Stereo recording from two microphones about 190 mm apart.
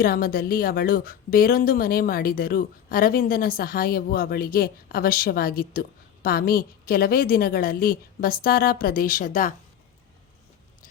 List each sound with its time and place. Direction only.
0.0 s a woman's voice: 50° left (ahead or behind)